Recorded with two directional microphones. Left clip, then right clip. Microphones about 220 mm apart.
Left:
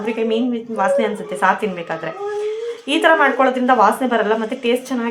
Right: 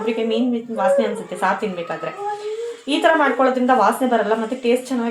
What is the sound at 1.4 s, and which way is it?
A woman's voice, 30° left (ahead or behind).